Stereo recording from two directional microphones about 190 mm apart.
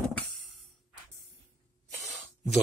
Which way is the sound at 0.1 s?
Centre (ahead or behind).